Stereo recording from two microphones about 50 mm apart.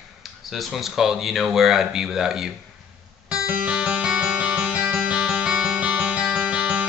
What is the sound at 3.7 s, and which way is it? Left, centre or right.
Music, right.